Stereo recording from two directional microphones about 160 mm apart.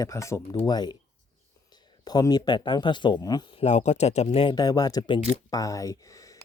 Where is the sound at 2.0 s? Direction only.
25° left (ahead or behind).